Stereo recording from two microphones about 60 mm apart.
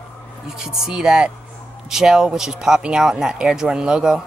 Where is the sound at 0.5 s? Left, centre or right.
Centre.